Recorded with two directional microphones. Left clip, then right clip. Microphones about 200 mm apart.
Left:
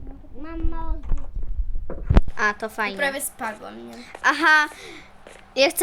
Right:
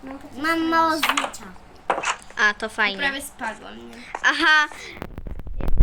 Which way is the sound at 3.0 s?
60° left (ahead or behind).